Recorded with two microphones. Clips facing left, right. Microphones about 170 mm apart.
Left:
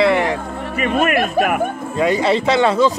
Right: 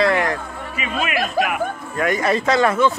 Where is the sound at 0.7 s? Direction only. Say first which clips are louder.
Left 7 dB; 55° left (ahead or behind).